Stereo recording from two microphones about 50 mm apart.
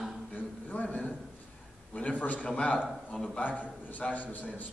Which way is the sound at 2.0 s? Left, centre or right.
Left.